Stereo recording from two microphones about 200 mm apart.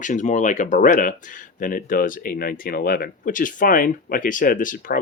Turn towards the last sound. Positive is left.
turn(degrees=45)  # may be behind; listen again after turning